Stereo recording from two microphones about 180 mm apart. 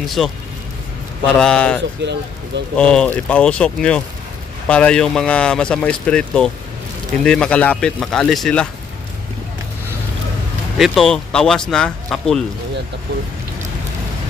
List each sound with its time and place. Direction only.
0.0 s speech: centre (ahead or behind)
1.4 s speech: 5° left (ahead or behind)
2.0 s speech: 75° right (ahead or behind)
2.8 s speech: 5° left (ahead or behind)
10.8 s speech: centre (ahead or behind)